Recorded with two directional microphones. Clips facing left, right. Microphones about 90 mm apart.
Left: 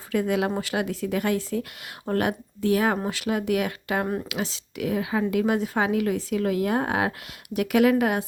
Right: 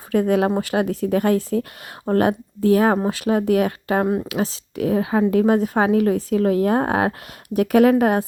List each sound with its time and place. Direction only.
0.1 s a woman's voice: 40° right (ahead or behind)
4.0 s speech: 20° right (ahead or behind)
4.3 s a woman's voice: 40° right (ahead or behind)